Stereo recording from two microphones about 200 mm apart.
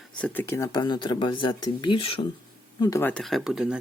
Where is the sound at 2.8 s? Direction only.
15° left (ahead or behind); by 3.8 s 5° right (ahead or behind).